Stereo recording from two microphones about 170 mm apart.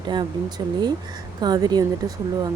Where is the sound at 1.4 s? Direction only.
25° right (ahead or behind).